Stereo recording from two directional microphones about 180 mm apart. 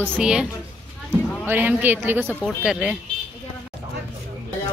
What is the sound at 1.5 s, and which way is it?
A woman's voice, 10° right (ahead or behind).